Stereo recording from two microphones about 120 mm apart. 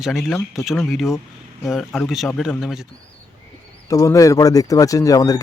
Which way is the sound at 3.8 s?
25° left (ahead or behind).